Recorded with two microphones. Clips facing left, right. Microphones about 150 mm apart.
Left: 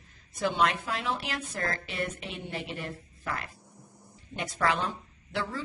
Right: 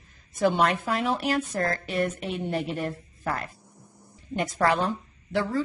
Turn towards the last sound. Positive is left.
turn(degrees=-45)  # may be behind; listen again after turning